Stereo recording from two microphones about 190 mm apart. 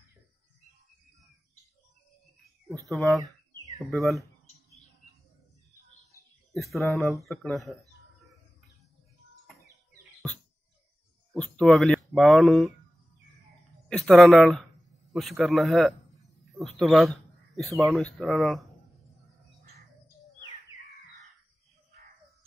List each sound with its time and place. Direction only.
2.9 s speech: centre (ahead or behind)
6.7 s speech: centre (ahead or behind)
11.3 s speech: 5° left (ahead or behind)
13.8 s speech: centre (ahead or behind)
20.7 s bird: 30° left (ahead or behind)